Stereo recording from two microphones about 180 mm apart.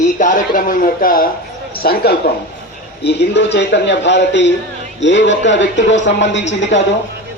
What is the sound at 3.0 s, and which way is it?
A man's voice, 70° left (ahead or behind).